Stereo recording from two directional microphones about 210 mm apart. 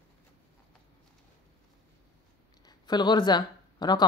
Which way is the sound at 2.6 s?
20° left (ahead or behind).